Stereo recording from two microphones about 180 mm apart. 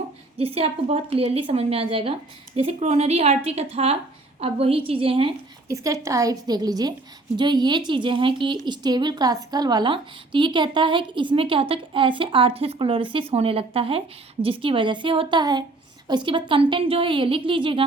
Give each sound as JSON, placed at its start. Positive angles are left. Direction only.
{"t": 0.3, "sound": "a woman's voice", "side_deg": -35}
{"t": 5.6, "sound": "a woman's voice", "side_deg": -15}